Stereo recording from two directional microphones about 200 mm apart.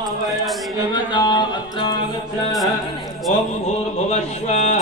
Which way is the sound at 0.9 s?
20° left (ahead or behind).